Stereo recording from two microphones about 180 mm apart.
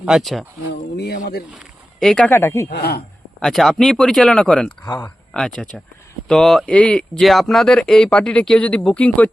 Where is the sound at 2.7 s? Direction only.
60° left (ahead or behind).